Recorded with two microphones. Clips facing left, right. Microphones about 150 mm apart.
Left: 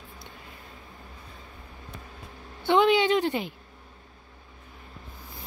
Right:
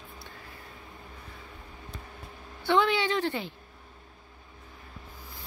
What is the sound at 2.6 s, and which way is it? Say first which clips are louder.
Speech: left 4 dB; 20° left (ahead or behind).